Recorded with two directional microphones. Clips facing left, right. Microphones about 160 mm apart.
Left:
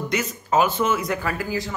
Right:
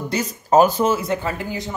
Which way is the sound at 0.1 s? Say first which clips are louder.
Right 6 dB; 35° right (ahead or behind).